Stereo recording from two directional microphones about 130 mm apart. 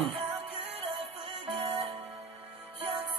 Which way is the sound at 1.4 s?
40° right (ahead or behind).